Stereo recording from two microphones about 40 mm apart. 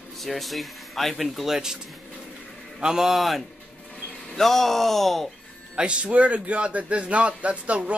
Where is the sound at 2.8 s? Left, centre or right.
Centre.